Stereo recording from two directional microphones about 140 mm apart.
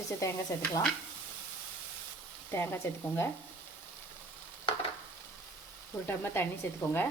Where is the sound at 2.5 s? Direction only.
15° left (ahead or behind).